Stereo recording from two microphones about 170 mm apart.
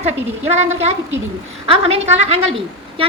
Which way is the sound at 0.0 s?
40° right (ahead or behind).